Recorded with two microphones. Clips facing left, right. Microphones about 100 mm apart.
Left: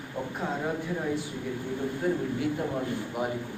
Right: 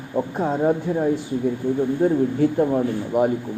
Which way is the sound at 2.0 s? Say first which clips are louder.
Right 9 dB; 30° right (ahead or behind).